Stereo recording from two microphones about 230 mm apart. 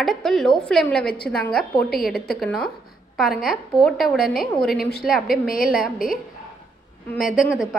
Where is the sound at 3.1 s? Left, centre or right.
Centre.